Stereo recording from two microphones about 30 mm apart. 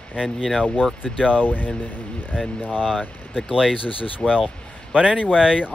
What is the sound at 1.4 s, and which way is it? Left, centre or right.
Speech, left.